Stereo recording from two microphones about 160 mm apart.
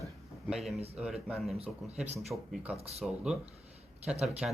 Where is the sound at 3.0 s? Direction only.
5° right (ahead or behind).